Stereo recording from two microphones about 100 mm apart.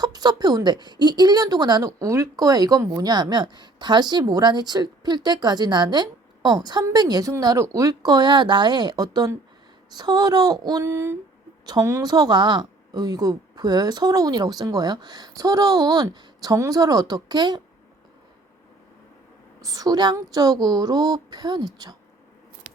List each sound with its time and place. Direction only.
0.0 s a woman's voice: 45° right (ahead or behind)
10.8 s a woman's voice: 30° right (ahead or behind); by 17.6 s 45° right (ahead or behind)
19.6 s a woman's voice: 35° right (ahead or behind)